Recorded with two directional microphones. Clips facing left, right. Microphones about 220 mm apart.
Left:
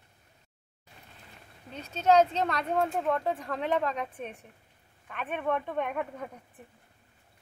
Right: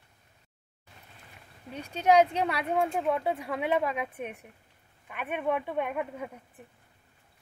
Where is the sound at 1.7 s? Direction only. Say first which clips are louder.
Even; 10° right (ahead or behind).